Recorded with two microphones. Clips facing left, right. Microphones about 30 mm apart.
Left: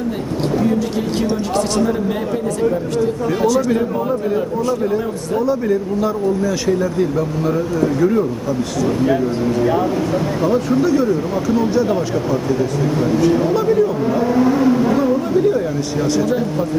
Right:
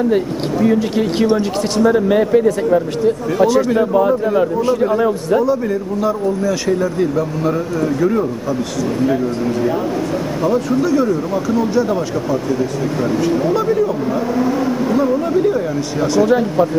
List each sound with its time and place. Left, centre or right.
0.7 s a man's voice: right
5.4 s speech: centre
10.4 s speech: centre
16.3 s speech: centre